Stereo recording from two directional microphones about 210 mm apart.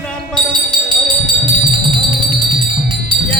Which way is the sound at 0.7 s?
25° right (ahead or behind).